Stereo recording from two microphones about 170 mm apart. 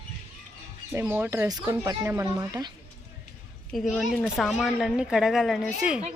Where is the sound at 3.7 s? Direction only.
Centre (ahead or behind).